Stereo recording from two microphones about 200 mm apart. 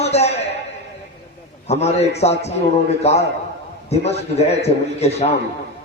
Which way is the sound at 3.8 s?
30° left (ahead or behind).